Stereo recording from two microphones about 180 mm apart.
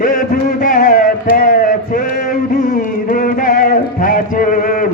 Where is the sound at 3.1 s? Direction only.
50° left (ahead or behind).